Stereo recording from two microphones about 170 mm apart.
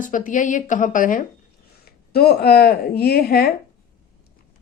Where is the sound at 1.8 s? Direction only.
65° left (ahead or behind).